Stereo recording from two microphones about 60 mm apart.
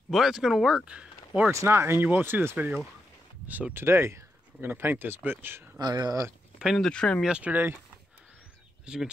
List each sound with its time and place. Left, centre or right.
0.1 s speech: centre
0.8 s speech: centre
1.5 s speech: right
2.0 s speech: right
3.8 s speech: right
5.9 s speech: right
6.8 s speech: centre
7.2 s speech: centre
7.5 s speech: right
8.8 s speech: centre